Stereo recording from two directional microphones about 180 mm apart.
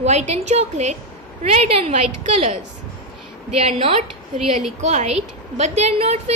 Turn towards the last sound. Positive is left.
turn(degrees=-35)  # may be behind; listen again after turning